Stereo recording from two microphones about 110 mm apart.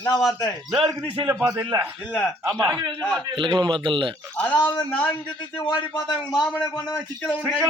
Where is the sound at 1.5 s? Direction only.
35° right (ahead or behind).